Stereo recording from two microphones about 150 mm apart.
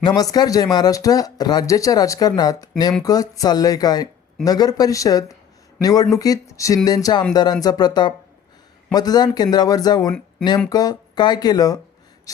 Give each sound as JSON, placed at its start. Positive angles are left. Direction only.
{"t": 0.2, "sound": "speech", "side_deg": 25}